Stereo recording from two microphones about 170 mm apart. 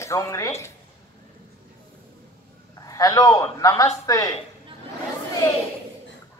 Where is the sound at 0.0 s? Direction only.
15° left (ahead or behind).